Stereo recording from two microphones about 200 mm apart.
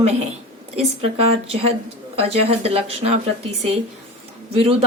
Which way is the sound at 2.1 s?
30° right (ahead or behind).